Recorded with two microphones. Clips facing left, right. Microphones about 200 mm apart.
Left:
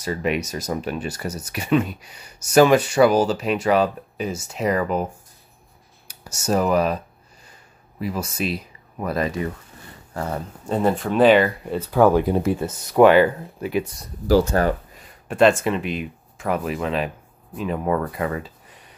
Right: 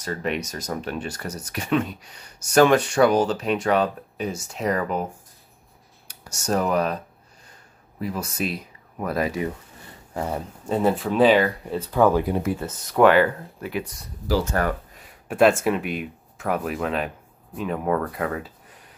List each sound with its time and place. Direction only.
0.0 s speech: 10° left (ahead or behind)
6.0 s speech: 5° left (ahead or behind)
8.0 s speech: centre (ahead or behind)
12.3 s speech: 30° left (ahead or behind)
12.5 s speech: 15° left (ahead or behind)
15.0 s a sound: 5° right (ahead or behind)
15.6 s speech: 5° right (ahead or behind)